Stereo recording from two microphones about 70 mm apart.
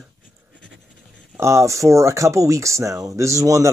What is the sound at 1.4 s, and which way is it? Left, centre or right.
Speech, right.